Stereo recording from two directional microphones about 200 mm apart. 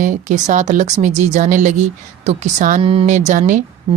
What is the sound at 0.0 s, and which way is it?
Speech, 40° right (ahead or behind).